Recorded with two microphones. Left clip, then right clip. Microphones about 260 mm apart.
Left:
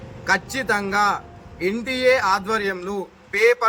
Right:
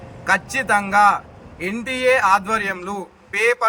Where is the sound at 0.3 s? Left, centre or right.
Centre.